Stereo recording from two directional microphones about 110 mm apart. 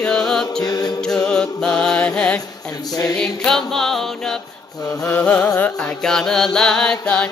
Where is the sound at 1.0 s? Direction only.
5° left (ahead or behind).